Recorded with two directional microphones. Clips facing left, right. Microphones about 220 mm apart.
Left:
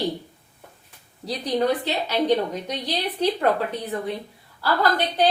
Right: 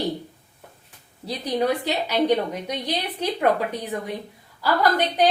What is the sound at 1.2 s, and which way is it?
A woman's voice, 10° right (ahead or behind).